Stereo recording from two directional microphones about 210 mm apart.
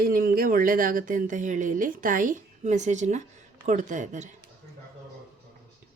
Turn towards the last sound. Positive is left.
turn(degrees=-35)  # may be behind; listen again after turning